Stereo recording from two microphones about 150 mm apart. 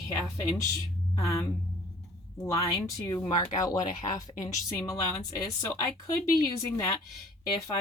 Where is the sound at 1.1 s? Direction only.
20° left (ahead or behind).